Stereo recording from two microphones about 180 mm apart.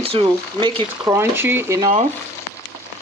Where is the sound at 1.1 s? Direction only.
10° right (ahead or behind).